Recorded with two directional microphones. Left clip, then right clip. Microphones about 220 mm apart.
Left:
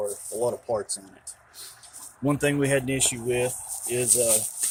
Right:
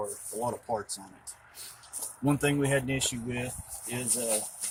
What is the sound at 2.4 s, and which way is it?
Speech, 40° left (ahead or behind).